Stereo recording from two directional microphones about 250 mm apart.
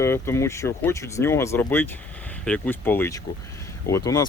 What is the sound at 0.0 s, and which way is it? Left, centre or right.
Speech, centre.